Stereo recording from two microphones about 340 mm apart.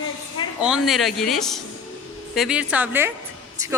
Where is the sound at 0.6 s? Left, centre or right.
Centre.